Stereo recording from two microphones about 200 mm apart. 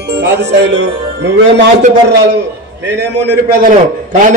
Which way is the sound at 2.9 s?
60° right (ahead or behind).